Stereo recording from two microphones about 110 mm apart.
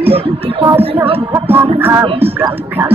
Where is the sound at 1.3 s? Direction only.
20° right (ahead or behind).